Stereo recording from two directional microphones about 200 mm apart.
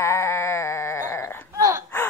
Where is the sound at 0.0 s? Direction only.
15° left (ahead or behind).